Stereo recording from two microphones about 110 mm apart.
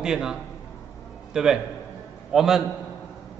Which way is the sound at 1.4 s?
5° right (ahead or behind).